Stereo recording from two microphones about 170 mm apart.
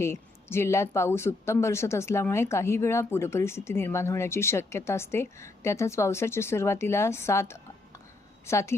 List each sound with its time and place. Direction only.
0.0 s speech: 15° left (ahead or behind)